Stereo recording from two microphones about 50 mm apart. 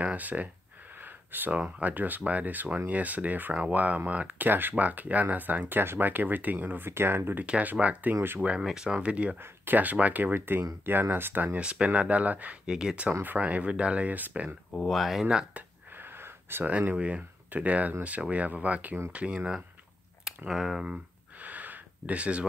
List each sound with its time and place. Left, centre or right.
0.0 s speech: right
0.9 s a sound: right
1.6 s speech: right
6.9 s speech: right
7.4 s speech: right
8.4 s speech: centre
9.4 s speech: right
11.6 s speech: right
12.6 s speech: centre; by 14.5 s right
14.9 s speech: centre
15.9 s wheeze: right
16.9 s speech: right
20.4 s speech: centre
21.4 s a sound: right